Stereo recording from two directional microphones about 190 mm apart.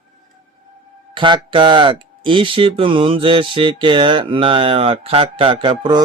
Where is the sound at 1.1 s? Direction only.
25° right (ahead or behind).